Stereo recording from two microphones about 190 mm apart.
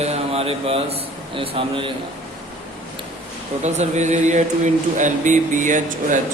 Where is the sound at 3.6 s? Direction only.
40° right (ahead or behind).